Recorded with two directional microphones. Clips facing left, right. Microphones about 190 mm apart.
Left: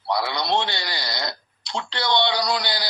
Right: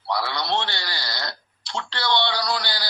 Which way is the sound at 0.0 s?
15° left (ahead or behind).